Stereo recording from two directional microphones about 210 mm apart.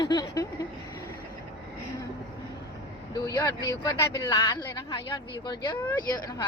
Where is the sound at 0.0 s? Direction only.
20° left (ahead or behind).